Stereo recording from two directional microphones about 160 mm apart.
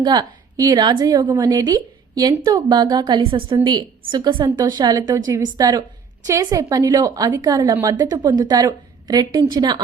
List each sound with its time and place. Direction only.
0.0 s a woman's voice: 25° right (ahead or behind)